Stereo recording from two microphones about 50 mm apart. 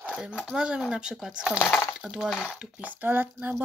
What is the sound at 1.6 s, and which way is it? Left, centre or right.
Speech, left.